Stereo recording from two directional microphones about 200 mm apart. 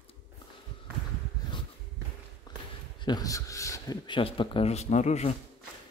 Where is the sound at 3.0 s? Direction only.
20° left (ahead or behind).